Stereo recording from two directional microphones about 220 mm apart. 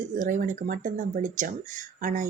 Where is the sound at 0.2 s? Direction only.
35° right (ahead or behind).